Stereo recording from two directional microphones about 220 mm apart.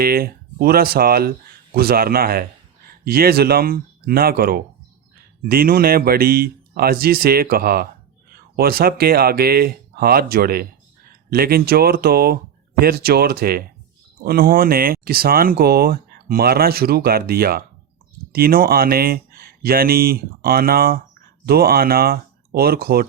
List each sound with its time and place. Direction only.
0.0 s speech: 45° right (ahead or behind)